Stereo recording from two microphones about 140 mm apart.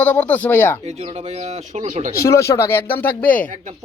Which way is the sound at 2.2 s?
20° left (ahead or behind).